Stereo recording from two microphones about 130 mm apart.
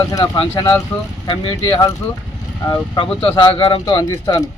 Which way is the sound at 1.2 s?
35° left (ahead or behind).